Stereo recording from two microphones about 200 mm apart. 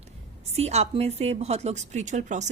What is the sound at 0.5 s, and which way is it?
A woman's voice, 30° right (ahead or behind).